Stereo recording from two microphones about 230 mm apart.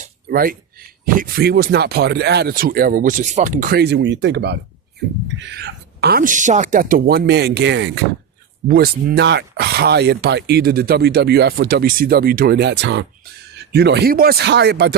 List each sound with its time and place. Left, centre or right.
0.0 s speech: right
8.6 s speech: right